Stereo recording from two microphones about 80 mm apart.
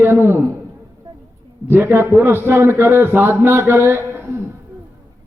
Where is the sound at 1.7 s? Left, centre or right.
Right.